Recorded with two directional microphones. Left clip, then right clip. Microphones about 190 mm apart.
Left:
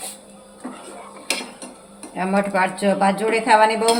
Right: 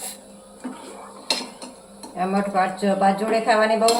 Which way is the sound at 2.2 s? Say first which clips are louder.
Left 2 dB; 60° left (ahead or behind).